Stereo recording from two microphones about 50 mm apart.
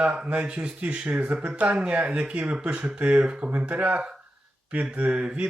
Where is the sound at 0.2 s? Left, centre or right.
Right.